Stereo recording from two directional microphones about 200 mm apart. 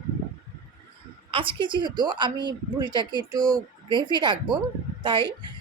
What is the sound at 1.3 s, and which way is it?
A woman's voice, 25° right (ahead or behind).